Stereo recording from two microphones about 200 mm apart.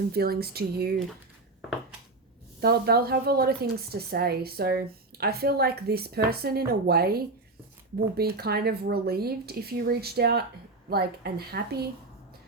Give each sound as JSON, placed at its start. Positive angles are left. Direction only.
{"t": 0.1, "sound": "a woman's voice", "side_deg": -50}
{"t": 2.6, "sound": "a woman's voice", "side_deg": -50}